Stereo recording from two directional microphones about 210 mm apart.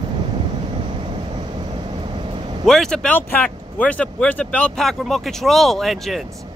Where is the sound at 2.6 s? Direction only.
Centre (ahead or behind).